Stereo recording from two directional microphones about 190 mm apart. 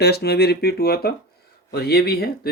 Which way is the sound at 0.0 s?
60° left (ahead or behind).